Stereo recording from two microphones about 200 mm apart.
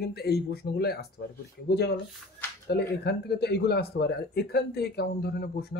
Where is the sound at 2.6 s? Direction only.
55° left (ahead or behind).